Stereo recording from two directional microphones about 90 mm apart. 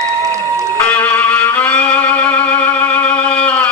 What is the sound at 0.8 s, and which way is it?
Music, 20° left (ahead or behind).